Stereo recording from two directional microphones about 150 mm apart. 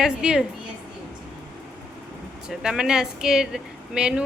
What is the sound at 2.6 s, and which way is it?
A woman's voice, 5° right (ahead or behind).